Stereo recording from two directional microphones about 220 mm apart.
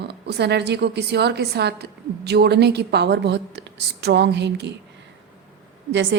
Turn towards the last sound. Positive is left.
turn(degrees=-55)  # may be behind; listen again after turning